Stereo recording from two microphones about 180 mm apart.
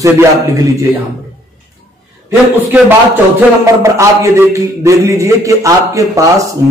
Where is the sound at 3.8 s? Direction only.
15° right (ahead or behind).